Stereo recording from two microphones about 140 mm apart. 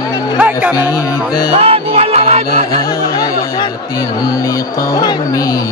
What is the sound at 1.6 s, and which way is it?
Music, 45° right (ahead or behind).